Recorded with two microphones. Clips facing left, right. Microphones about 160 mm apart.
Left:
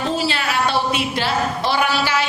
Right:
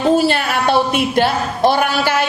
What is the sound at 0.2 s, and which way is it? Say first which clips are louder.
A woman's voice: right 5 dB; 50° right (ahead or behind).